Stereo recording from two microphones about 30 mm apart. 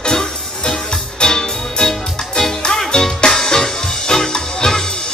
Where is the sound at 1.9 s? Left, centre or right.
Centre.